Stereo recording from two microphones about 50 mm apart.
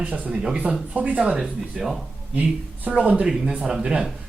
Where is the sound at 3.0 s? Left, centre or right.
Right.